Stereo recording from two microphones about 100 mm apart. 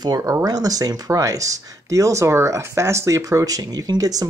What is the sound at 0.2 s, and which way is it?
Speech, 35° right (ahead or behind).